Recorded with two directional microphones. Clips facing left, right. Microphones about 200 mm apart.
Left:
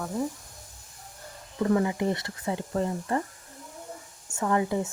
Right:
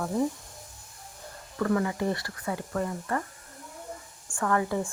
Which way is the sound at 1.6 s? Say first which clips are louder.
Left 2 dB; 20° left (ahead or behind).